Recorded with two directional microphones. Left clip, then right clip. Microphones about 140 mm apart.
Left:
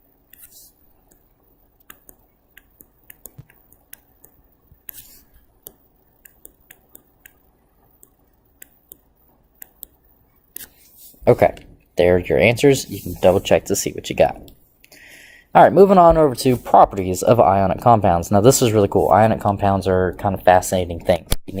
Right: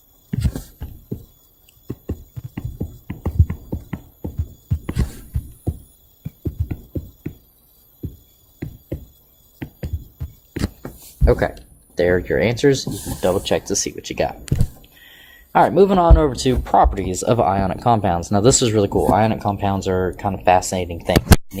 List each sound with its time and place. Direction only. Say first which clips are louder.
11.9 s speech: left 2 dB; 15° left (ahead or behind)
13.2 s speech: left 4 dB; 30° left (ahead or behind)
14.8 s a sound: left 1 dB; 25° left (ahead or behind)
16.0 s speech: left 5 dB; 5° left (ahead or behind)